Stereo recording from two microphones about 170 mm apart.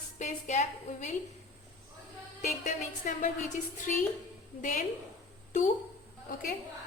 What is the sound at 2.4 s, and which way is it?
Speech, 45° left (ahead or behind).